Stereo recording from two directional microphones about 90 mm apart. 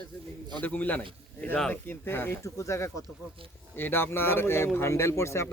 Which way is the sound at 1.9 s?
25° left (ahead or behind).